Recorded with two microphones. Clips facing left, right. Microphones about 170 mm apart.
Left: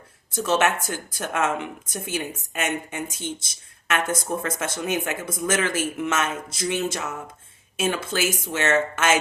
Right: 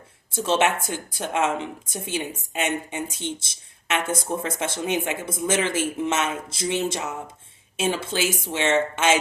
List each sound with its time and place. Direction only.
0.3 s a woman's voice: 30° right (ahead or behind)